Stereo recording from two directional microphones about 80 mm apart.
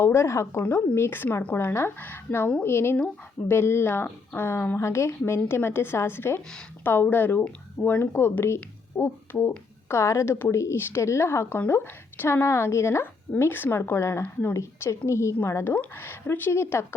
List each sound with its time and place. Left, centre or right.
0.0 s speech: left